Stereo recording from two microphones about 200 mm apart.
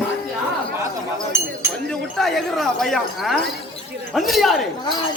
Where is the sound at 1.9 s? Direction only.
Centre (ahead or behind).